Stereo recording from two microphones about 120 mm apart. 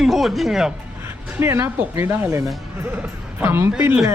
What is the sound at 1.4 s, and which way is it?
Speech, 20° right (ahead or behind).